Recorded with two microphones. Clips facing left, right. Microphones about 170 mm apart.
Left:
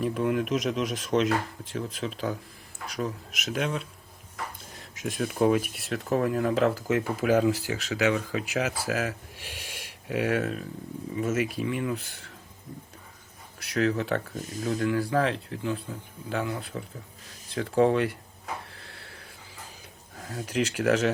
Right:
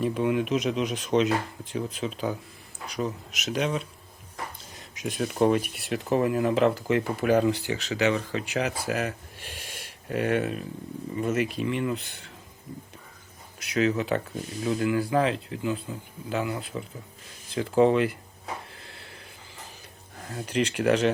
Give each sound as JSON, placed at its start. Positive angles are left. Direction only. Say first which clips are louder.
{"t": 0.0, "sound": "speech", "louder": "right 1 dB", "side_deg": 0}
{"t": 13.6, "sound": "speech", "louder": "right 1 dB", "side_deg": 0}
{"t": 18.7, "sound": "a sound", "louder": "right 1 dB", "side_deg": 0}
{"t": 20.1, "sound": "speech", "louder": "right 1 dB", "side_deg": 0}